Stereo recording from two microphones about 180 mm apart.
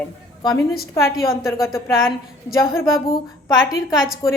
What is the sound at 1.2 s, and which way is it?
A woman's voice, 20° left (ahead or behind).